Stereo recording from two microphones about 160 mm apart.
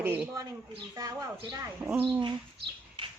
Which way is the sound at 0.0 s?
15° right (ahead or behind).